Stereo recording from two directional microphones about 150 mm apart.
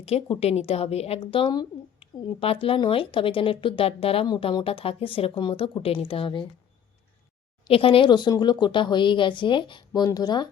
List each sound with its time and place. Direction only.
0.0 s speech: 40° left (ahead or behind)
7.7 s speech: 35° left (ahead or behind)